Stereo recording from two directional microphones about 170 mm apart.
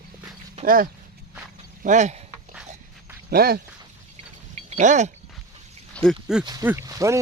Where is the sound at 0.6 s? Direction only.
55° right (ahead or behind).